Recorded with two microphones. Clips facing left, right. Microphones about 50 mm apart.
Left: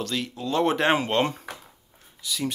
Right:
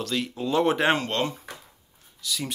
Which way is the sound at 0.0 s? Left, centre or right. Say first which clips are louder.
Right 1 dB; centre.